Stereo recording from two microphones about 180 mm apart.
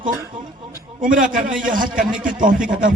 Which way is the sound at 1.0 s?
50° right (ahead or behind).